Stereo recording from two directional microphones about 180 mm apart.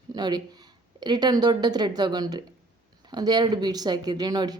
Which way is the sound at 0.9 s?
25° right (ahead or behind).